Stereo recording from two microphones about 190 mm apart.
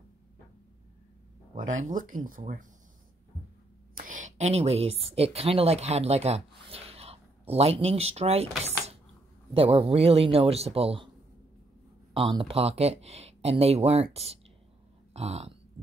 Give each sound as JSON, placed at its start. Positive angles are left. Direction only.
{"t": 1.7, "sound": "speech", "side_deg": -45}
{"t": 3.9, "sound": "a woman's voice", "side_deg": -45}
{"t": 12.1, "sound": "speech", "side_deg": -30}